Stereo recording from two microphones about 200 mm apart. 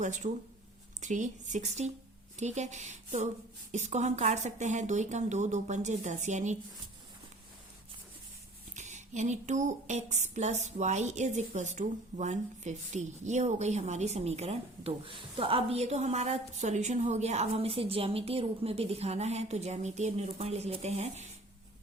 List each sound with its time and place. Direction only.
0.0 s speech: 40° right (ahead or behind)
8.7 s speech: 35° right (ahead or behind)